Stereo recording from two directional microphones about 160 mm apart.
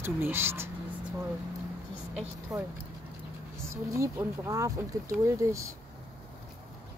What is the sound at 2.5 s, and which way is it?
Speech, 20° right (ahead or behind).